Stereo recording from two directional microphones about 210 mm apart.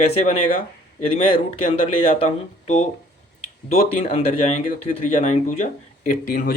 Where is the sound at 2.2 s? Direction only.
35° left (ahead or behind).